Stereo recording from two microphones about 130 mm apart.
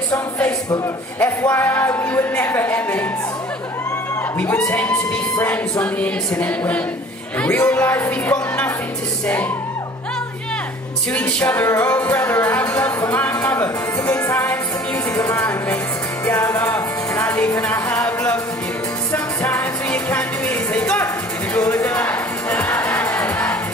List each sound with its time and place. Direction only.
1.2 s speech: 20° left (ahead or behind)
4.4 s speech: 20° left (ahead or behind)
11.1 s speech: 15° left (ahead or behind)
13.5 s music: 20° left (ahead or behind)
15.1 s speech: 20° left (ahead or behind)
16.3 s music: 20° left (ahead or behind)
21.5 s music: 25° left (ahead or behind)
22.0 s music: 15° left (ahead or behind)